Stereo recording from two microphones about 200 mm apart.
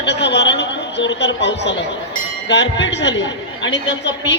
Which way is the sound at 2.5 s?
60° left (ahead or behind).